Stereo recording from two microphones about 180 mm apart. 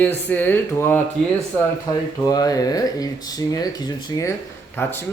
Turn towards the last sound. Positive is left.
turn(degrees=10)  # may be behind; listen again after turning